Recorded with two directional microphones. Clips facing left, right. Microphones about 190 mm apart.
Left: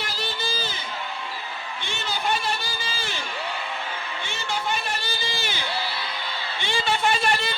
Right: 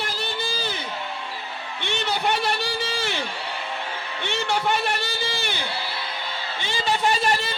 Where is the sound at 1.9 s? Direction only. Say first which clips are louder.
Right 3 dB; 65° right (ahead or behind).